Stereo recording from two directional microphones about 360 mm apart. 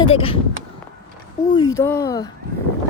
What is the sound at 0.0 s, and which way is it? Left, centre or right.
Speech, centre.